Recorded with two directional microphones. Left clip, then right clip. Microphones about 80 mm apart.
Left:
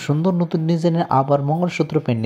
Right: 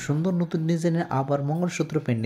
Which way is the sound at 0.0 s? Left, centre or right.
Left.